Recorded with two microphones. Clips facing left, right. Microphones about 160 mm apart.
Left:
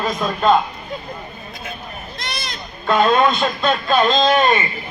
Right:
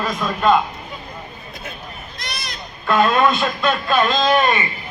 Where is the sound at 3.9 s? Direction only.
25° left (ahead or behind).